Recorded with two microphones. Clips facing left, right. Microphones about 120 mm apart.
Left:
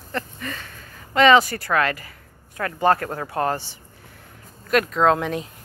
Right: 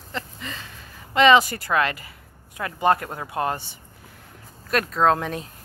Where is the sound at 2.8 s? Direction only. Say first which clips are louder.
Left 1 dB; 20° right (ahead or behind).